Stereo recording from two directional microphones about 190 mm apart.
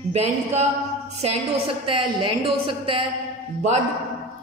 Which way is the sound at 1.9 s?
30° right (ahead or behind).